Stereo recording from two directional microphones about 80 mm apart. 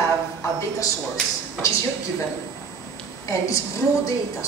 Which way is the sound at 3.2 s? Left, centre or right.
Left.